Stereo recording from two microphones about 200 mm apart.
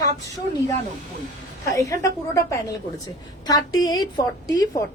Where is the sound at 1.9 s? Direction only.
15° left (ahead or behind).